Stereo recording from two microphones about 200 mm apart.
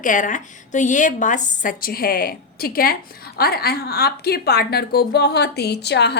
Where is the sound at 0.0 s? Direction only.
40° left (ahead or behind).